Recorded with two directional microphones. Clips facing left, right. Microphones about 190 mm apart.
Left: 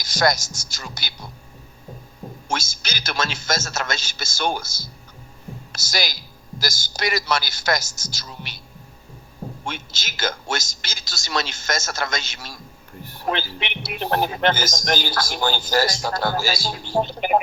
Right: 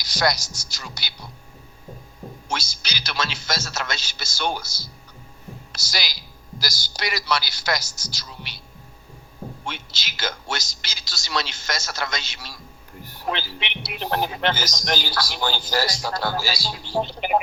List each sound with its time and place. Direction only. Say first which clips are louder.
0.0 s speech: left 3 dB; 50° left (ahead or behind)
2.5 s a man's voice: left 3 dB; 50° left (ahead or behind)
9.6 s speech: left 2 dB; 50° left (ahead or behind)